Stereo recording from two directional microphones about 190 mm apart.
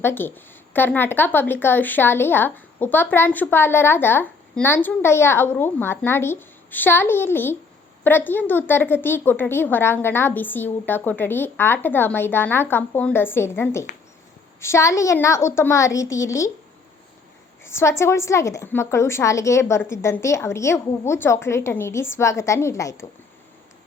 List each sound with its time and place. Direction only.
0.0 s speech: 10° left (ahead or behind)
17.6 s speech: 15° left (ahead or behind)